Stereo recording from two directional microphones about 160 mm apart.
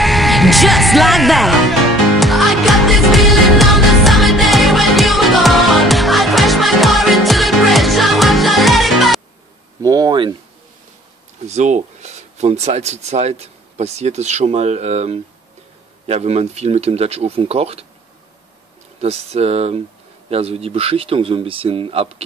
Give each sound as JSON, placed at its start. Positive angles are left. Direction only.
{"t": 0.0, "sound": "music", "side_deg": 0}
{"t": 9.8, "sound": "speech", "side_deg": -25}
{"t": 11.4, "sound": "speech", "side_deg": -45}
{"t": 18.9, "sound": "speech", "side_deg": -40}